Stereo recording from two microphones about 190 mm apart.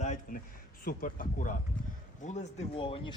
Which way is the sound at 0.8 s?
45° left (ahead or behind).